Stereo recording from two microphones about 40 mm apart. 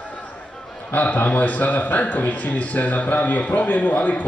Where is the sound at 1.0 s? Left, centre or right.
Left.